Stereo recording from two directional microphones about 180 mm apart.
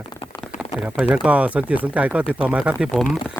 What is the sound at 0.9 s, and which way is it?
Speech, 10° right (ahead or behind).